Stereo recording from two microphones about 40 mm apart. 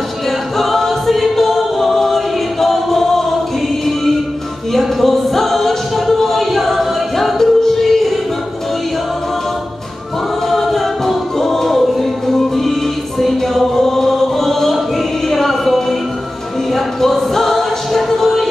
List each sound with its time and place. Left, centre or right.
0.6 s music: centre
4.7 s a capella: centre
10.5 s choir: centre
13.2 s music: centre